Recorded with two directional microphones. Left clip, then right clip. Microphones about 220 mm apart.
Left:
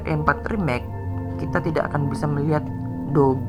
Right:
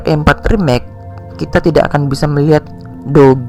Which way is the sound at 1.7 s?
30° right (ahead or behind).